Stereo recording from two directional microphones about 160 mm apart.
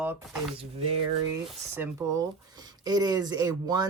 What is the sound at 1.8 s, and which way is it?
Speech, 20° right (ahead or behind).